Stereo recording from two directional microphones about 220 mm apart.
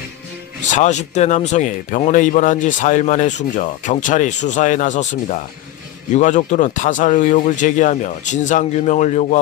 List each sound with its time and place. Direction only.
0.7 s speech: 35° left (ahead or behind)